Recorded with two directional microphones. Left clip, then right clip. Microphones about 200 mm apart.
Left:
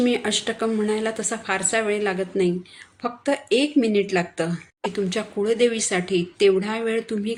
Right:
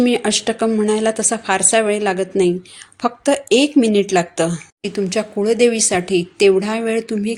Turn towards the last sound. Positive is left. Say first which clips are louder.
# right 5 dB
turn(degrees=-30)  # may be behind; listen again after turning